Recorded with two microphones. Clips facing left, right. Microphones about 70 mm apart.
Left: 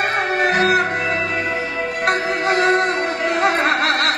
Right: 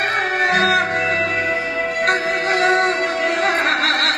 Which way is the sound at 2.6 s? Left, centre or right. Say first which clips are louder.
Right 1 dB; right.